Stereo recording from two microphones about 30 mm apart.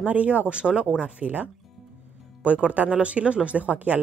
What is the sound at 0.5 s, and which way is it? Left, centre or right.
Speech, right.